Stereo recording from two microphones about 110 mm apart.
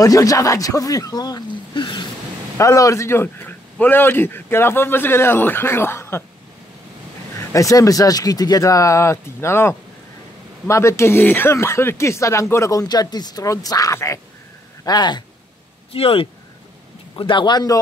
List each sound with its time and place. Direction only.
0.0 s speech: 30° left (ahead or behind)
2.5 s speech: 30° left (ahead or behind)
7.3 s speech: 30° left (ahead or behind)
14.9 s speech: 40° left (ahead or behind)
15.9 s speech: 60° left (ahead or behind)
17.1 s speech: 45° left (ahead or behind)